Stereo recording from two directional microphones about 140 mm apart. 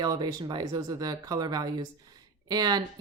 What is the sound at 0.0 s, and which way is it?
Speech, 30° right (ahead or behind).